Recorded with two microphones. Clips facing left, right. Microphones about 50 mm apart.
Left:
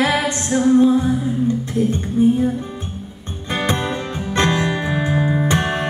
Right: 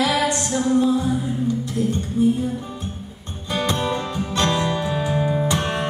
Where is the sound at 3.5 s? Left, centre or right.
Left.